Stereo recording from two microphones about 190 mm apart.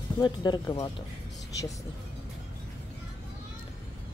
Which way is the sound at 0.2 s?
20° left (ahead or behind).